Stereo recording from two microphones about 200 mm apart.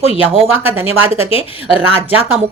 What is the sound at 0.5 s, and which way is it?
Speech, 10° right (ahead or behind).